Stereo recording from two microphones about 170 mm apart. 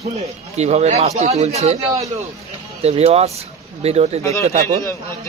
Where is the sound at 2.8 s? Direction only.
35° right (ahead or behind).